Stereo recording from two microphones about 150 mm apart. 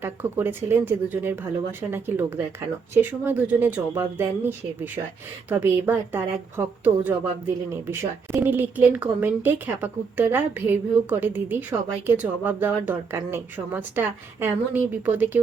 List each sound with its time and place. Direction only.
0.0 s a woman's voice: 15° right (ahead or behind)